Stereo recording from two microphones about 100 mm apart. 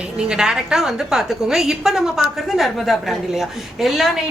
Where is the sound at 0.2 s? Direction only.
5° right (ahead or behind).